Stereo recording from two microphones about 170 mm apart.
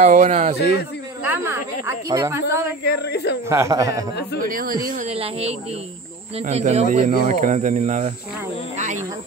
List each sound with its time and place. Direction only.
0.0 s speech: 45° right (ahead or behind)
1.2 s speech: 15° right (ahead or behind)
2.9 s speech: 75° left (ahead or behind)
3.4 s speech: 15° right (ahead or behind)
4.1 s speech: 80° left
4.5 s speech: 55° right (ahead or behind)
5.0 s speech: 35° right (ahead or behind)